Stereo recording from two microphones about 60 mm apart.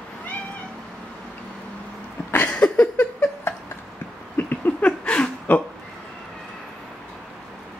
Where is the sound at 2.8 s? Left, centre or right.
Left.